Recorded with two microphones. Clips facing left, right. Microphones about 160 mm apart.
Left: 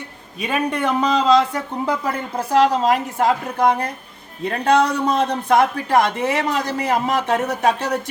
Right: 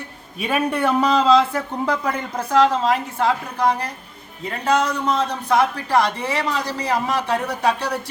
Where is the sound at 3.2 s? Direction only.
50° left (ahead or behind).